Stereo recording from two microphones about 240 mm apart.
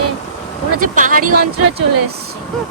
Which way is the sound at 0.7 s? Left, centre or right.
Right.